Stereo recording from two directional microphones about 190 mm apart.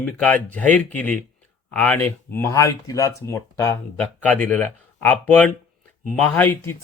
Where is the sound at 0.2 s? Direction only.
5° left (ahead or behind).